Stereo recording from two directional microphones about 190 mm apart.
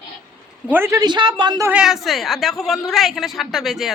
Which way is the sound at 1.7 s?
5° right (ahead or behind).